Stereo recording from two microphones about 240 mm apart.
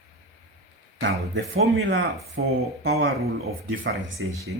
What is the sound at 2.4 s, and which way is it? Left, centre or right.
Speech, right.